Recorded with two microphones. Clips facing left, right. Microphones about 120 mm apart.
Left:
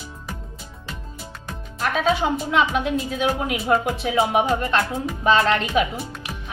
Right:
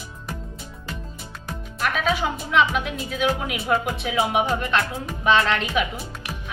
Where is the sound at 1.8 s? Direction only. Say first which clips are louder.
Left 3 dB; 30° left (ahead or behind).